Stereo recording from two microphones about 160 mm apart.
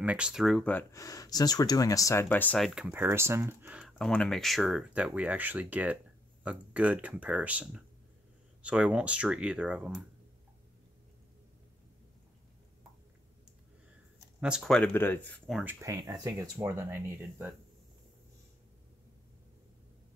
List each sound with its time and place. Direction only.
0.0 s speech: 10° right (ahead or behind)
0.9 s speech: 20° left (ahead or behind)
2.7 s speech: 5° right (ahead or behind)
14.4 s speech: centre (ahead or behind)
15.6 s speech: 20° right (ahead or behind)